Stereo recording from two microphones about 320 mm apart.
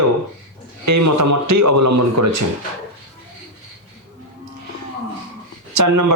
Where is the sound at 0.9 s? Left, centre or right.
Right.